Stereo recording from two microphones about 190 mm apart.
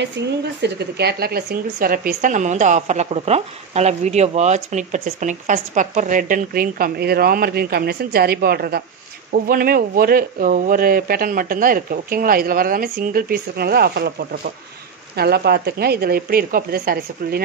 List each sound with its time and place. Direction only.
0.2 s speech: 65° right (ahead or behind)
15.1 s speech: 55° right (ahead or behind)